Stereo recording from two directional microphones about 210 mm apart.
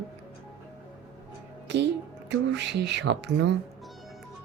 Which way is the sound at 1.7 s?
55° right (ahead or behind).